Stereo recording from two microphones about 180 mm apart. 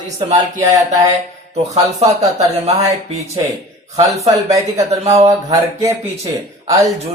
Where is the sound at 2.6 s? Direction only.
35° right (ahead or behind).